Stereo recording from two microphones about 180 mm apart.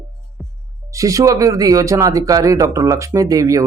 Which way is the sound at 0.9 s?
15° right (ahead or behind).